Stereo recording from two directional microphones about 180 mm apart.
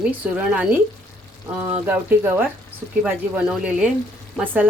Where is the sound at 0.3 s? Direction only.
5° right (ahead or behind).